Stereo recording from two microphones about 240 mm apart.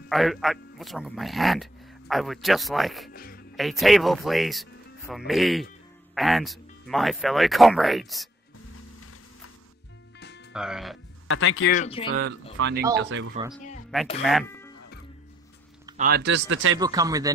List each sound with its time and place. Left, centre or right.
0.1 s speech: centre
3.1 s music: left
3.5 s speech: centre
10.5 s speech: centre
11.2 s speech: left
11.7 s speech: left
12.1 s speech: right
14.2 s speech: centre
16.0 s speech: right
16.7 s speech: centre